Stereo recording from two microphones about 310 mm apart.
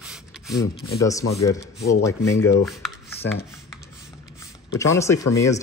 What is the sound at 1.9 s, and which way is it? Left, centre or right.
Speech, centre.